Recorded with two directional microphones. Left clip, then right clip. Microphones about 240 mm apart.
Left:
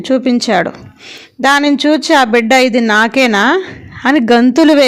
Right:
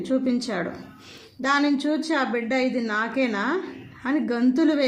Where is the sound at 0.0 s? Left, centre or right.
Left.